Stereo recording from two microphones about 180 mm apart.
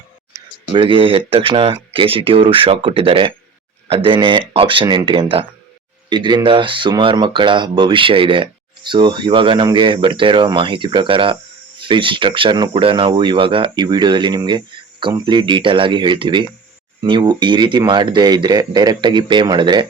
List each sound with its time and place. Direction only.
0.7 s speech: 30° right (ahead or behind)